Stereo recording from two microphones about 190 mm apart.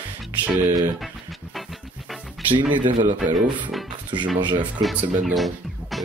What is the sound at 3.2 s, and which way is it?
Speech, centre (ahead or behind).